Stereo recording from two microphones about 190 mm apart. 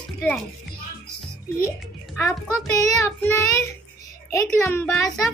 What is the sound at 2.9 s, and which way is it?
Child singing, 10° left (ahead or behind).